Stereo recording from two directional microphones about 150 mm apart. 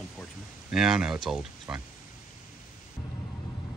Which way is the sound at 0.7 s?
5° right (ahead or behind).